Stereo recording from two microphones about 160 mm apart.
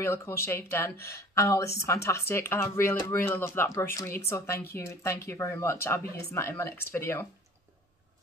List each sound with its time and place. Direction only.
0.0 s speech: 15° left (ahead or behind)